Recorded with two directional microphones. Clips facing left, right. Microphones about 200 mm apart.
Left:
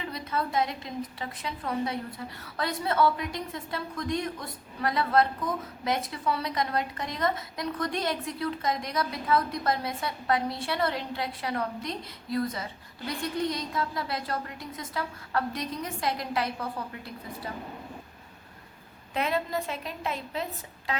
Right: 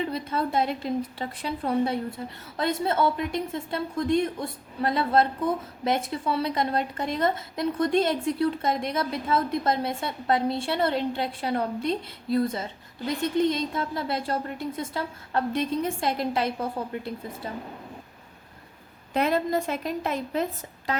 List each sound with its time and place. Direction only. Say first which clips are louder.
0.1 s a woman's voice: right 3 dB; 30° right (ahead or behind)
19.1 s a woman's voice: right 5 dB; 40° right (ahead or behind)